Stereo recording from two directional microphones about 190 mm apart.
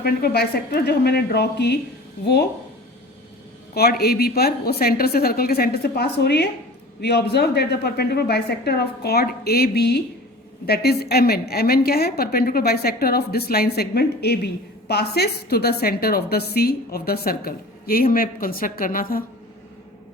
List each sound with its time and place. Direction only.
0.0 s a woman's voice: 55° left (ahead or behind)
3.8 s a woman's voice: 55° left (ahead or behind)